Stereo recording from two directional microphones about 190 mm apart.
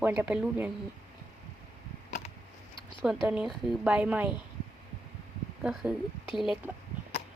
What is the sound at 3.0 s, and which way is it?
A woman's voice, 5° right (ahead or behind).